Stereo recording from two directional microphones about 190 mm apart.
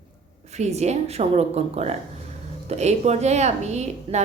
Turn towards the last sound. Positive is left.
turn(degrees=-35)  # may be behind; listen again after turning